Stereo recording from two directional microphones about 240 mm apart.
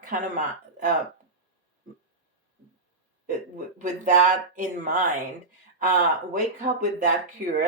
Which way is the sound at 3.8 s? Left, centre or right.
Right.